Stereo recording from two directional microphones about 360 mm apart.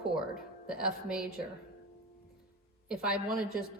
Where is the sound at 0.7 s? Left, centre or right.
Centre.